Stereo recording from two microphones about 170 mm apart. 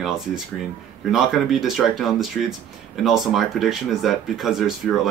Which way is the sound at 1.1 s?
Centre (ahead or behind).